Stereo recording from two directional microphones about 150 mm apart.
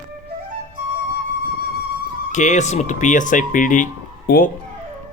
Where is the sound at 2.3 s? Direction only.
55° left (ahead or behind).